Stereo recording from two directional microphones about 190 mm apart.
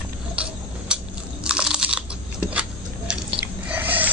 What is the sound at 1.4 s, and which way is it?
Crunch, 5° right (ahead or behind).